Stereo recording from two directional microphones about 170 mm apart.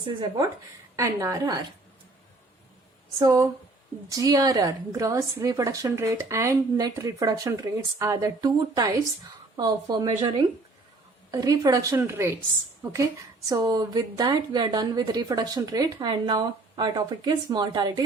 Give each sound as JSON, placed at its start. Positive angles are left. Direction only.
{"t": 0.9, "sound": "a woman's voice", "side_deg": -20}
{"t": 3.2, "sound": "a woman's voice", "side_deg": -20}